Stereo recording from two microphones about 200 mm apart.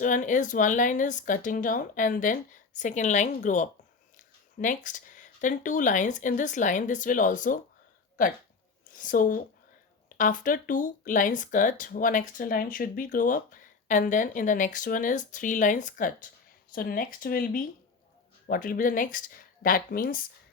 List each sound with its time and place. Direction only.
0.0 s speech: 40° left (ahead or behind)
8.9 s a woman's voice: 40° left (ahead or behind)